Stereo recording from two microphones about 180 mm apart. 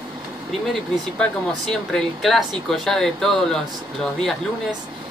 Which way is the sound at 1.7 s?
Centre (ahead or behind).